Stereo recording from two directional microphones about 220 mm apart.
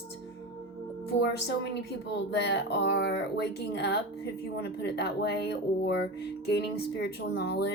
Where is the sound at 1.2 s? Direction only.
50° left (ahead or behind).